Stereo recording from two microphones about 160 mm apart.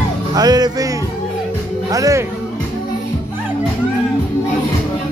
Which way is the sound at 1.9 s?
20° right (ahead or behind).